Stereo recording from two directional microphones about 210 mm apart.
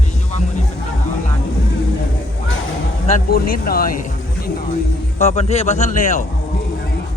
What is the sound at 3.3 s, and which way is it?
A man's voice, 45° left (ahead or behind).